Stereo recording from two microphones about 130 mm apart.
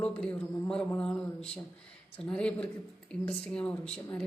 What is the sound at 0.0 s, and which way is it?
A man's voice, 10° left (ahead or behind).